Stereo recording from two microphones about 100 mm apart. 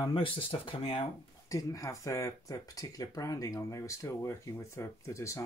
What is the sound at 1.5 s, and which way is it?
Speech, 35° left (ahead or behind).